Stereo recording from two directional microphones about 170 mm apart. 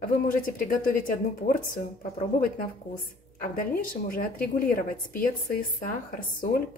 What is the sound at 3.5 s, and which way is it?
A woman's voice, 55° left (ahead or behind).